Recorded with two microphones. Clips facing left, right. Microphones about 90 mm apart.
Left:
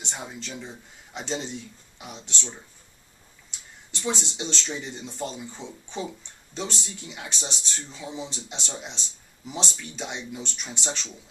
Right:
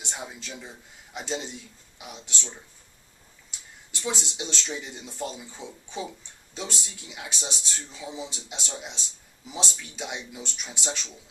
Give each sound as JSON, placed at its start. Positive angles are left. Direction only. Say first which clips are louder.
{"t": 0.0, "sound": "a man's voice", "louder": "left 1 dB", "side_deg": -5}
{"t": 4.1, "sound": "a man's voice", "louder": "left 3 dB", "side_deg": -5}